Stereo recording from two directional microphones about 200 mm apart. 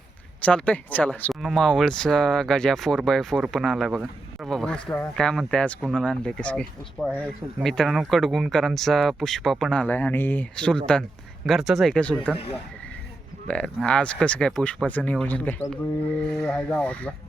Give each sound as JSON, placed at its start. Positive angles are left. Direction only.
{"t": 0.4, "sound": "speech", "side_deg": 5}
{"t": 13.5, "sound": "speech", "side_deg": 5}